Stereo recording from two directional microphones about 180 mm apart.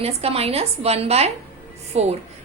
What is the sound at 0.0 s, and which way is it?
A woman's voice, 35° right (ahead or behind).